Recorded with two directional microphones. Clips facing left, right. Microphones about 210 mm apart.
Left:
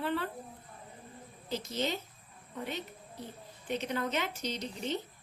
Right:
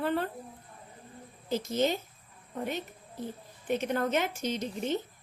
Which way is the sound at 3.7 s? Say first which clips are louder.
Right 5 dB; 50° right (ahead or behind).